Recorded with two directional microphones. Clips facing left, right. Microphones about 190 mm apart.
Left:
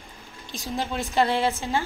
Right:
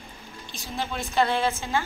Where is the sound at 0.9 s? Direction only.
35° left (ahead or behind).